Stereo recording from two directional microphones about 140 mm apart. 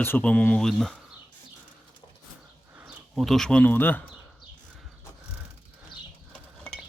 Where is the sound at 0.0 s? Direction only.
10° left (ahead or behind).